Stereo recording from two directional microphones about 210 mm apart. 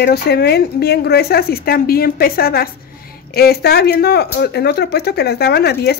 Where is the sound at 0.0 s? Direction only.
50° left (ahead or behind).